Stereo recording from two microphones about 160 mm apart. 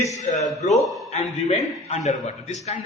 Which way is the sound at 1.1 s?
45° left (ahead or behind).